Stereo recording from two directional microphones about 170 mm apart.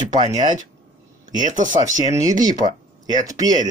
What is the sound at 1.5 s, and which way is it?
Speech, 50° right (ahead or behind).